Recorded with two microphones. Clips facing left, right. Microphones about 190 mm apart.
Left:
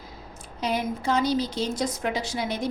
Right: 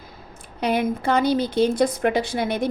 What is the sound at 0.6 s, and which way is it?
A woman's voice, 60° right (ahead or behind).